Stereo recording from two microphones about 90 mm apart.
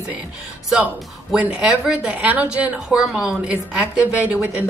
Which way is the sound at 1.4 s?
10° right (ahead or behind).